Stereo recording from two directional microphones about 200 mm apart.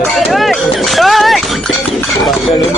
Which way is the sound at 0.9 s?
Centre (ahead or behind).